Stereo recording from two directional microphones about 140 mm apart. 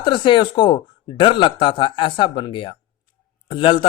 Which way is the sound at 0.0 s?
35° left (ahead or behind).